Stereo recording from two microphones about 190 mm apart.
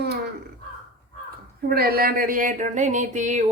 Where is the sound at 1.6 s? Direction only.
55° right (ahead or behind).